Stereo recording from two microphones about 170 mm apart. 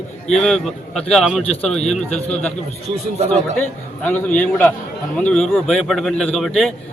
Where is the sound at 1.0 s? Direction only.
Centre (ahead or behind).